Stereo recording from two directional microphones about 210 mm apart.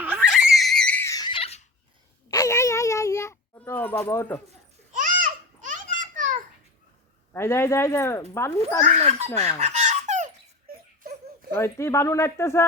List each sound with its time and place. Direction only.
0.0 s screaming: 5° right (ahead or behind); by 1.6 s 30° left (ahead or behind)
2.3 s a sound: 15° left (ahead or behind)
4.9 s babbling: 40° right (ahead or behind)
7.3 s speech: 10° left (ahead or behind)
9.6 s fowl: 30° right (ahead or behind)
11.5 s speech: 10° left (ahead or behind)